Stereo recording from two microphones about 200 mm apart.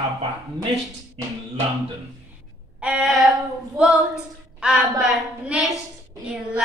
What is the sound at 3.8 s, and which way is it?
A woman's voice, 5° right (ahead or behind).